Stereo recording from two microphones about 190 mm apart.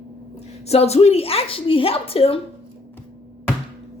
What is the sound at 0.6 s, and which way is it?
A woman's voice, 35° left (ahead or behind).